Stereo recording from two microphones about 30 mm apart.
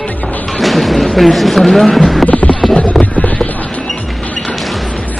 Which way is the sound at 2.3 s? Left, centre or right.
Left.